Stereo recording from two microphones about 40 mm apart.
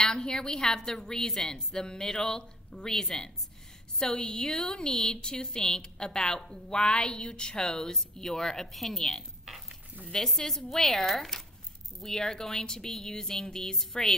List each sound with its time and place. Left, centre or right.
0.0 s a woman's voice: centre
10.2 s a woman's voice: centre